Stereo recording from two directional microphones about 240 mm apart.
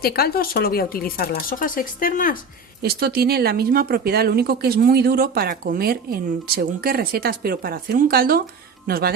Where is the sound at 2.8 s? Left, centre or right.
Right.